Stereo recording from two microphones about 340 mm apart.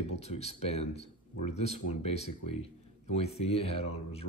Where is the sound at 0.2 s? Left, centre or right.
Centre.